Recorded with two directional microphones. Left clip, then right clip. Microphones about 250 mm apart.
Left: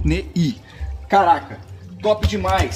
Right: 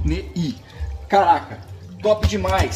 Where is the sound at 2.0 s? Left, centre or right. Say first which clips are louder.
Even; left.